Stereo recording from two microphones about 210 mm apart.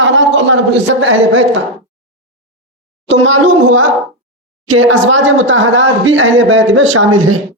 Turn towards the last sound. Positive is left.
turn(degrees=-70)  # may be behind; listen again after turning